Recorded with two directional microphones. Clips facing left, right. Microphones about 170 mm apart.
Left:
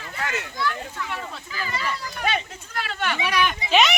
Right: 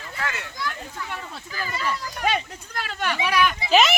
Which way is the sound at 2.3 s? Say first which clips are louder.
Right 1 dB; 40° right (ahead or behind).